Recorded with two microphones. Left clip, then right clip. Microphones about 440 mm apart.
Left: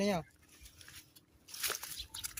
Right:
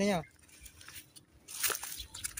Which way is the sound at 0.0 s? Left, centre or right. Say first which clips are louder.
Right 2 dB; left.